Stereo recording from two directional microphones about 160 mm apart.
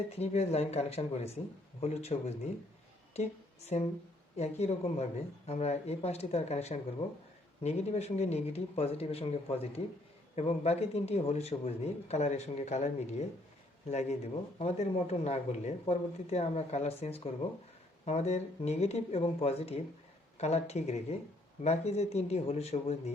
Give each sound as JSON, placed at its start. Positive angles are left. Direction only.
{"t": 0.2, "sound": "a man's voice", "side_deg": 40}
{"t": 14.6, "sound": "a man's voice", "side_deg": 40}